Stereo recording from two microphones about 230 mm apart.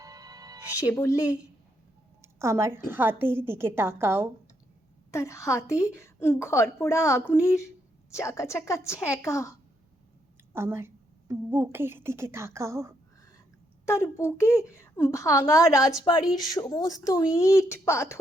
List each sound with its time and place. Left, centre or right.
0.0 s music: centre
0.9 s a woman's voice: centre
2.2 s a woman's voice: centre
5.1 s a woman's voice: centre
10.5 s a woman's voice: centre
13.8 s a woman's voice: centre